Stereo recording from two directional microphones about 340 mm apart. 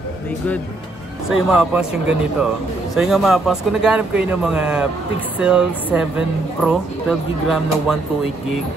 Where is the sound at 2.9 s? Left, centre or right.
Centre.